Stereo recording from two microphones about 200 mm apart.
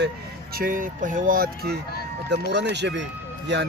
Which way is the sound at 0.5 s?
45° right (ahead or behind).